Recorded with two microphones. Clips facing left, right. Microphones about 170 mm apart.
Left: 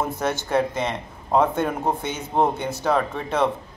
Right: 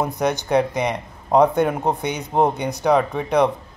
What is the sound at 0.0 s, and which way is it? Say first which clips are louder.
Speech: right 3 dB; 15° right (ahead or behind).